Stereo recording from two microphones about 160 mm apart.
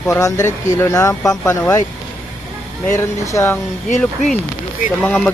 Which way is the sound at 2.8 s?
20° left (ahead or behind).